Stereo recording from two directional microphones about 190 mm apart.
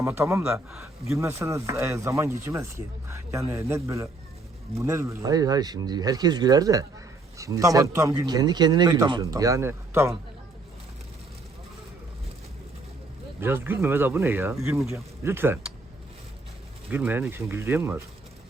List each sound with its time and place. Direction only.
0.0 s speech: 15° right (ahead or behind)
13.4 s speech: 10° right (ahead or behind)
16.9 s speech: 10° right (ahead or behind)